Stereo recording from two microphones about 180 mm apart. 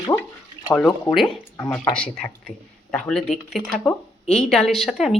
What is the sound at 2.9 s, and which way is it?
Speech, 5° left (ahead or behind).